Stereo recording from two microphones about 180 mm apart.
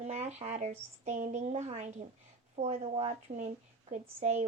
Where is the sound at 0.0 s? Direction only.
35° right (ahead or behind).